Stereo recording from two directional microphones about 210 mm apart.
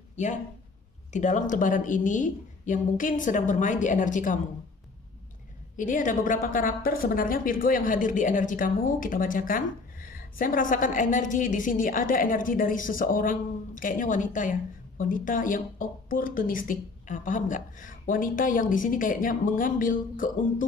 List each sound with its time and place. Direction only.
0.1 s a sound: 35° left (ahead or behind)
1.1 s speech: 35° left (ahead or behind)
5.8 s speech: 40° left (ahead or behind)